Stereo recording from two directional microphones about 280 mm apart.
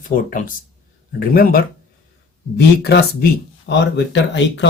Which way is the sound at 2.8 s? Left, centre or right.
Left.